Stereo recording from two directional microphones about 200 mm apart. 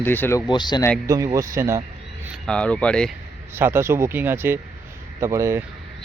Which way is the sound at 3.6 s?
10° right (ahead or behind).